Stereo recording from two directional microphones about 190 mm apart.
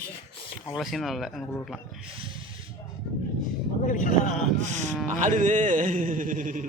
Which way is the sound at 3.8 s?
40° left (ahead or behind).